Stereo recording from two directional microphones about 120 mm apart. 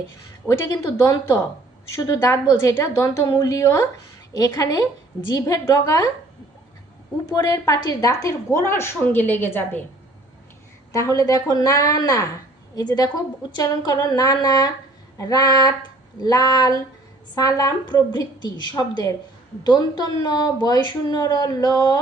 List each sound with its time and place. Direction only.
0.4 s a woman's voice: 25° left (ahead or behind)
7.3 s a woman's voice: 30° left (ahead or behind)
10.9 s speech: 30° left (ahead or behind)